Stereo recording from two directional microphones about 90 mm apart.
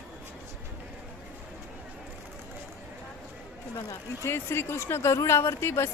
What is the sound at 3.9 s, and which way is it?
Speech, 30° left (ahead or behind).